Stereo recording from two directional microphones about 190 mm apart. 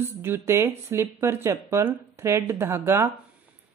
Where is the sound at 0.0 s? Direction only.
10° right (ahead or behind).